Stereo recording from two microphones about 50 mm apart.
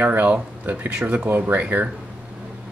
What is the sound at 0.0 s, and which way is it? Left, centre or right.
Speech, right.